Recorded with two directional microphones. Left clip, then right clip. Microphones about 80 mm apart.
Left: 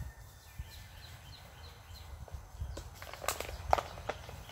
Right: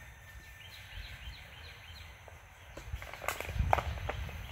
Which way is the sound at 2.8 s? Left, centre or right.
Centre.